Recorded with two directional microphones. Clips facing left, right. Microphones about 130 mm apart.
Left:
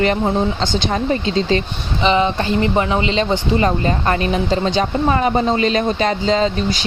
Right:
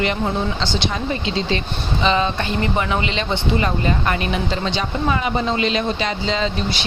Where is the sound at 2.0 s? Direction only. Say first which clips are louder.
Left 4 dB; 20° left (ahead or behind).